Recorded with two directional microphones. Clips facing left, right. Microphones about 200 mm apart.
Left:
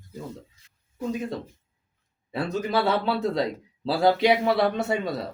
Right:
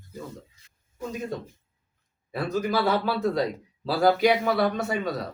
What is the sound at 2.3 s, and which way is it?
A man's voice, 25° left (ahead or behind).